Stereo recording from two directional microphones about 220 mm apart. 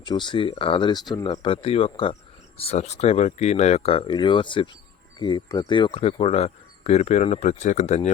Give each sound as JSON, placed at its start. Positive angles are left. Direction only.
{"t": 0.0, "sound": "speech", "side_deg": 20}